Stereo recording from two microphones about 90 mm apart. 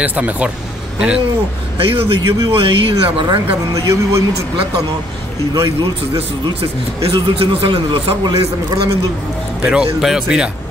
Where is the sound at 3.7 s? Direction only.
40° right (ahead or behind).